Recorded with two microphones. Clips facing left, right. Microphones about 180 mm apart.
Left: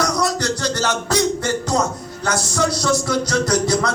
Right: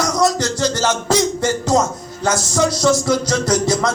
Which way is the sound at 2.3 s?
60° left (ahead or behind).